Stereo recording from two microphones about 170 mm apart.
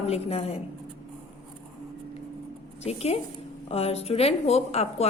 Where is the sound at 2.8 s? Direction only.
40° left (ahead or behind).